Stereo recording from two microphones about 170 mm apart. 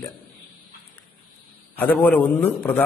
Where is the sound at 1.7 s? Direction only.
10° left (ahead or behind).